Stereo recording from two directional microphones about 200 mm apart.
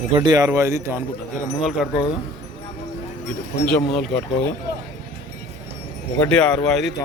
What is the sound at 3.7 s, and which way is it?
Speech, 5° left (ahead or behind).